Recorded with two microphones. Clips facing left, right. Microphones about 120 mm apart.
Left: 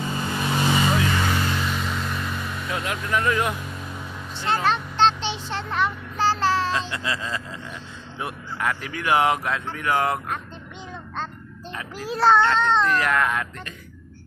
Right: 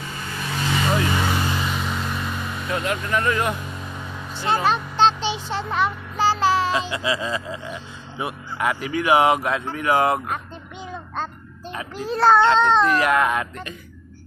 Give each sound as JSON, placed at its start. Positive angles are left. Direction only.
{"t": 0.2, "sound": "vehicle", "side_deg": 25}
{"t": 1.1, "sound": "vehicle", "side_deg": -10}
{"t": 4.4, "sound": "child singing", "side_deg": -10}
{"t": 8.2, "sound": "speech", "side_deg": -10}
{"t": 12.0, "sound": "a child's voice", "side_deg": 0}
{"t": 12.4, "sound": "speech", "side_deg": -20}